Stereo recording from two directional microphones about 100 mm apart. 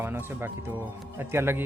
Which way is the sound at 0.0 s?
20° right (ahead or behind).